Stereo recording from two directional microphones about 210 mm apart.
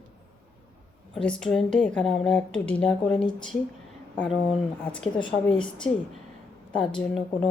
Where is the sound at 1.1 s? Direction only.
5° left (ahead or behind).